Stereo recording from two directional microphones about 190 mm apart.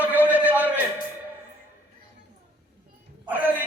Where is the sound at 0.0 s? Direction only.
10° right (ahead or behind).